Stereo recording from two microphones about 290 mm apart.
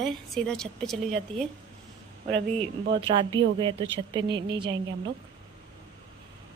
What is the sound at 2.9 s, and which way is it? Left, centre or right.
Speech, centre.